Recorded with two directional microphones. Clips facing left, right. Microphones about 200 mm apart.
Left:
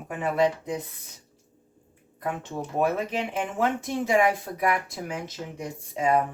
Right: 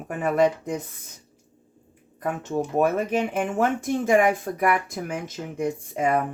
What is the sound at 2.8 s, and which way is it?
Speech, 45° right (ahead or behind).